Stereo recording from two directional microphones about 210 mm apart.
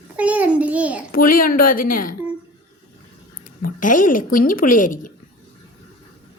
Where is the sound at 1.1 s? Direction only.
40° left (ahead or behind).